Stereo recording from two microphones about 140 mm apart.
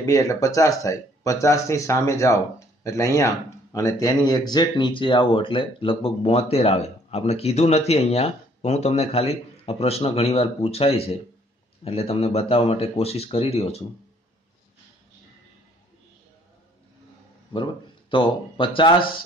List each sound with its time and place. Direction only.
0.0 s speech: 25° left (ahead or behind); by 13.8 s 45° left (ahead or behind)
18.1 s speech: 35° left (ahead or behind)